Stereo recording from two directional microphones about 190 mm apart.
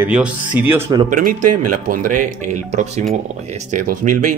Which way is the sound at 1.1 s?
45° right (ahead or behind).